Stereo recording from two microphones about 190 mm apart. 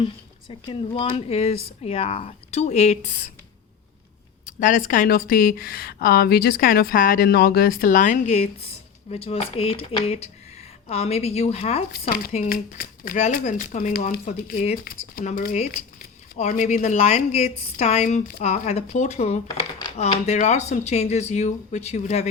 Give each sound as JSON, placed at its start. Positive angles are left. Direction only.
{"t": 0.0, "sound": "speech", "side_deg": 25}
{"t": 4.4, "sound": "speech", "side_deg": 45}
{"t": 12.0, "sound": "speech", "side_deg": 50}